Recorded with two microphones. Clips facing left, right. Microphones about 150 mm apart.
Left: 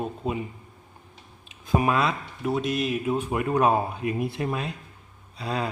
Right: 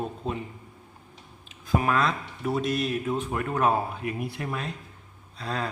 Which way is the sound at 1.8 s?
15° left (ahead or behind).